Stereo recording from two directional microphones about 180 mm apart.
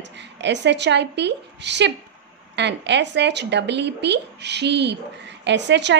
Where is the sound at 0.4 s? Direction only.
75° right (ahead or behind).